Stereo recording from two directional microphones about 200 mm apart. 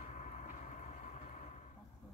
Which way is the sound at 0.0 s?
35° left (ahead or behind).